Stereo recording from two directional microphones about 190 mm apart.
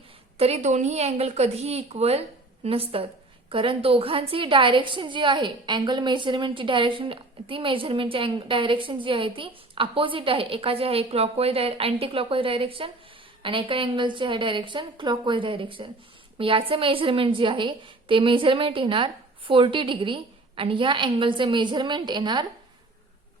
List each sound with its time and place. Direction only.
0.3 s a woman's voice: 35° right (ahead or behind)